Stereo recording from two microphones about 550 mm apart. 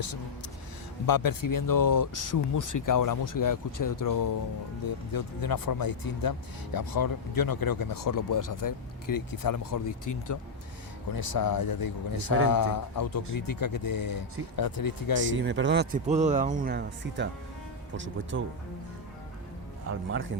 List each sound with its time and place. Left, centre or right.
1.0 s speech: left
11.1 s speech: left
15.3 s speech: centre
20.1 s speech: right